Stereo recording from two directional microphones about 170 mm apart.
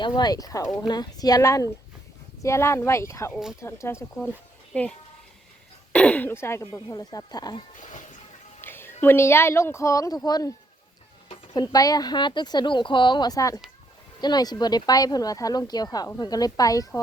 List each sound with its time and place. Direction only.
0.0 s speech: 25° left (ahead or behind)
7.8 s speech: 45° left (ahead or behind)
8.6 s speech: 10° left (ahead or behind)
11.5 s speech: 20° left (ahead or behind)